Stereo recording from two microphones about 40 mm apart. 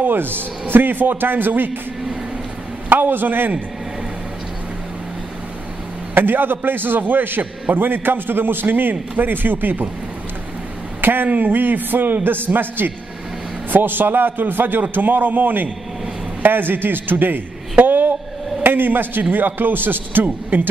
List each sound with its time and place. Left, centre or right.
0.0 s a man's voice: right
2.9 s a man's voice: right
6.1 s a man's voice: right
11.0 s a sound: right
11.2 s a man's voice: right